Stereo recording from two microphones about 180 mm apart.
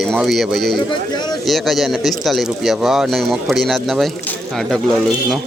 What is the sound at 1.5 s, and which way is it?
Speech, centre (ahead or behind).